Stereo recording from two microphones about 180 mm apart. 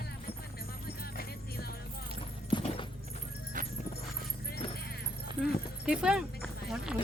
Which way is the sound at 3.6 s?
45° right (ahead or behind).